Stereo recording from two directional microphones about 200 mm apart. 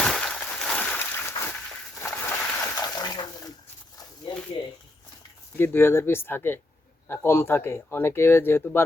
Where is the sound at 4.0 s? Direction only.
20° left (ahead or behind).